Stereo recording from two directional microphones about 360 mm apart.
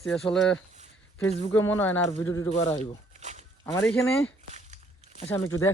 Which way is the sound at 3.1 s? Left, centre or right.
Centre.